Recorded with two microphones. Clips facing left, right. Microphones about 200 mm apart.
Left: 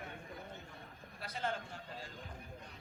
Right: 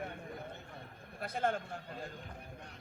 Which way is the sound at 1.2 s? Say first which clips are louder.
Right 6 dB; 55° right (ahead or behind).